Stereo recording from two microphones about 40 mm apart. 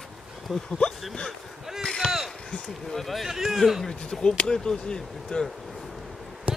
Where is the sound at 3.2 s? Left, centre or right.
Centre.